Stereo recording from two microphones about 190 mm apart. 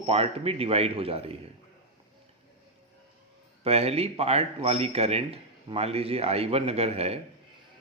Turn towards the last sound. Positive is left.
turn(degrees=-35)  # may be behind; listen again after turning